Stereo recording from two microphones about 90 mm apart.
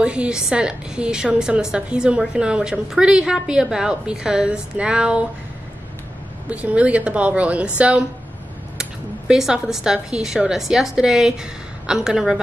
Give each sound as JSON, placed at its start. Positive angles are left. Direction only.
{"t": 0.0, "sound": "a woman's voice", "side_deg": -10}
{"t": 6.5, "sound": "a woman's voice", "side_deg": -15}
{"t": 9.3, "sound": "a woman's voice", "side_deg": -5}